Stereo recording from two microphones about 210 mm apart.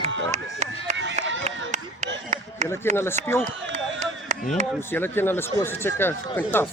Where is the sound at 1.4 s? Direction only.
35° right (ahead or behind).